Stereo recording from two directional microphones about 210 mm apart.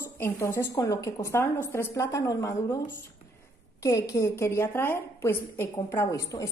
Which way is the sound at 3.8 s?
15° left (ahead or behind).